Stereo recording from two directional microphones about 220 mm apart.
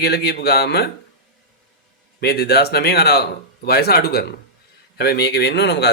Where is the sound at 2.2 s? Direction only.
45° left (ahead or behind).